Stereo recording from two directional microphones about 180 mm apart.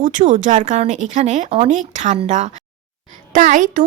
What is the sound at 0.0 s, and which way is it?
A woman's voice, 45° right (ahead or behind).